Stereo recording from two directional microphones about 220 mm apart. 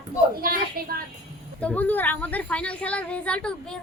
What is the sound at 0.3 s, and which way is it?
Speech, 40° right (ahead or behind).